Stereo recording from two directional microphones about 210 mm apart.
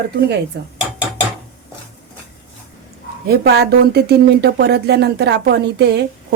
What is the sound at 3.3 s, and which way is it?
A woman's voice, 50° right (ahead or behind).